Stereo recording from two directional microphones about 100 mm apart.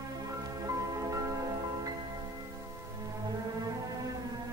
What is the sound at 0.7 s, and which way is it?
Music, 35° right (ahead or behind).